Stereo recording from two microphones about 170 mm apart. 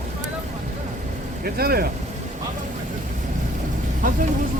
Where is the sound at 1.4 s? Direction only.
65° right (ahead or behind).